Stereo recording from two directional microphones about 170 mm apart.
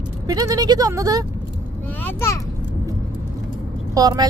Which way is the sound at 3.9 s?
25° right (ahead or behind).